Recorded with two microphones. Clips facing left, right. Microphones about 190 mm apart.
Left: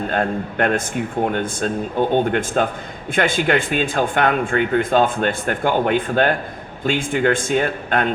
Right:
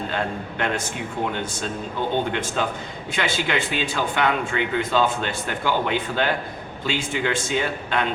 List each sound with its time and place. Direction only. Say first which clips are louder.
0.1 s speech: left 6 dB; 50° left (ahead or behind)